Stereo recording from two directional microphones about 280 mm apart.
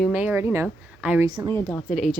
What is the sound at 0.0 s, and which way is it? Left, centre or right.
Speech, centre.